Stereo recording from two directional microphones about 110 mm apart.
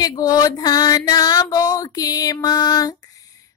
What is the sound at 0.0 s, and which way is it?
Child singing, 35° left (ahead or behind).